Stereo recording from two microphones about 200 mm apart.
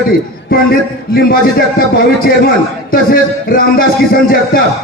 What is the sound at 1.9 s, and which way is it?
A man's voice, 45° left (ahead or behind).